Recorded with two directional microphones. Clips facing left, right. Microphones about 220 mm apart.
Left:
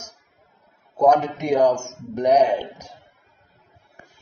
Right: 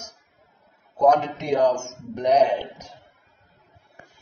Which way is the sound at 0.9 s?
10° left (ahead or behind).